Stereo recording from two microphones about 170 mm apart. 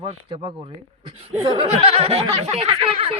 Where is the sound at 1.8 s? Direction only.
35° right (ahead or behind).